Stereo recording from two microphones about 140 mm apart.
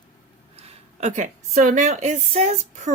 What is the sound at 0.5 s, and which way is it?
A woman's voice, 55° right (ahead or behind).